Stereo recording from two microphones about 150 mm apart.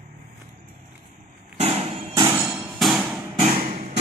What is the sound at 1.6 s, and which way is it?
Hammer, 40° right (ahead or behind).